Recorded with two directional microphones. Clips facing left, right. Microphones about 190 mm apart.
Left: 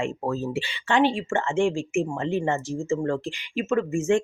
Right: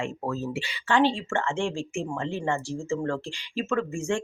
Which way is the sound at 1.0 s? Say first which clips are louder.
Left 2 dB; 15° left (ahead or behind).